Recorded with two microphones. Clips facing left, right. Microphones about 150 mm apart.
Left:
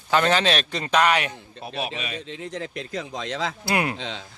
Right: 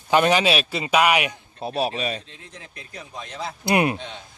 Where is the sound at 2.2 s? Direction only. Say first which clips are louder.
Left 12 dB; 90° left.